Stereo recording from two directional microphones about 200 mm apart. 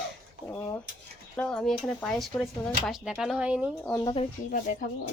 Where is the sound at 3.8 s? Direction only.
15° left (ahead or behind).